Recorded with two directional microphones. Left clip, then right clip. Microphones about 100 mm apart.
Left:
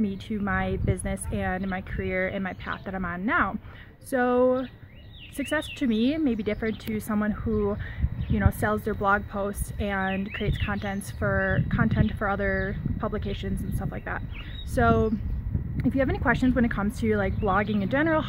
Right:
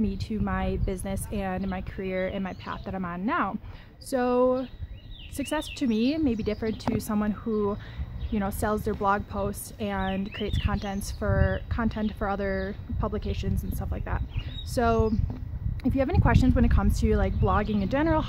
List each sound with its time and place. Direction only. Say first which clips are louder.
0.0 s a woman's voice: left 1 dB; 40° right (ahead or behind)
8.4 s a woman's voice: left 1 dB; 35° right (ahead or behind)
11.1 s a woman's voice: left 3 dB; 30° right (ahead or behind)